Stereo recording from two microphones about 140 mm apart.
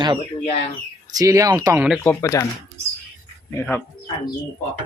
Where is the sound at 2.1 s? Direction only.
25° left (ahead or behind).